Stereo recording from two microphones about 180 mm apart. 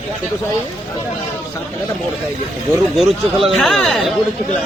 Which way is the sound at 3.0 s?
Centre (ahead or behind).